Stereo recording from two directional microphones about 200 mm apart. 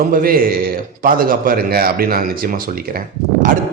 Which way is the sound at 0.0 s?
45° right (ahead or behind).